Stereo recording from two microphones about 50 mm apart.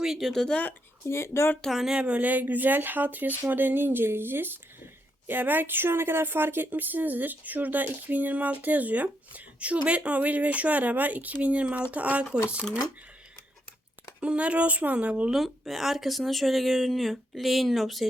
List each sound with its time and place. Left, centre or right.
0.2 s speech: centre
1.0 s speech: left
1.9 s speech: right
2.2 s speech: right
14.2 s speech: right
15.3 s speech: centre